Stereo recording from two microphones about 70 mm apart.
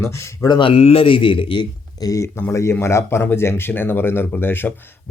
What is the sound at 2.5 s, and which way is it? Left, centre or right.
Speech, left.